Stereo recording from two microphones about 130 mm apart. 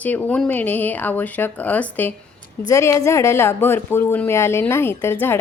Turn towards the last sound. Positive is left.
turn(degrees=20)  # may be behind; listen again after turning